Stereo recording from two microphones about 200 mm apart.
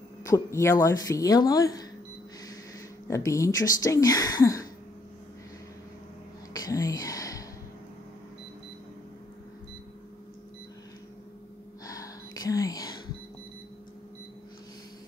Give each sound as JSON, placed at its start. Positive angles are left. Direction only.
{"t": 0.2, "sound": "speech", "side_deg": 15}
{"t": 3.1, "sound": "speech", "side_deg": 15}
{"t": 6.5, "sound": "a sound", "side_deg": 15}
{"t": 11.8, "sound": "whispering", "side_deg": 15}